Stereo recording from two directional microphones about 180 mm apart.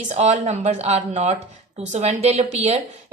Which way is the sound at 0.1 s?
40° right (ahead or behind).